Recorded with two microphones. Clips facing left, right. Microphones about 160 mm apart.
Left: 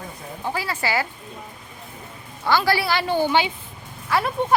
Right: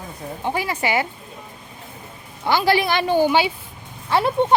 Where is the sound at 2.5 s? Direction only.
20° right (ahead or behind).